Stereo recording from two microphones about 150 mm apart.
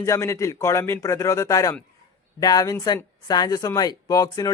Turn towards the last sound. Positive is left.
turn(degrees=25)  # may be behind; listen again after turning